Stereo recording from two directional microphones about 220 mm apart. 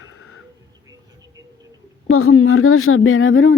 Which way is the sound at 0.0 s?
75° left (ahead or behind).